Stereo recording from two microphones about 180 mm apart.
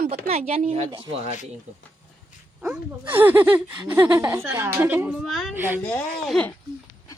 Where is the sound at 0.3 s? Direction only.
35° right (ahead or behind).